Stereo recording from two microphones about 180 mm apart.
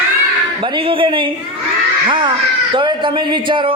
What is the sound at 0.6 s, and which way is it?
A man's voice, 30° right (ahead or behind).